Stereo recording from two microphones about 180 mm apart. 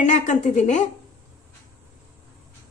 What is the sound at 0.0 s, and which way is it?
Speech, 40° left (ahead or behind).